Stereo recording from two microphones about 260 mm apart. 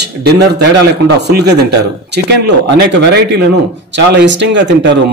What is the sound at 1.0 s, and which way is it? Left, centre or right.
Speech, right.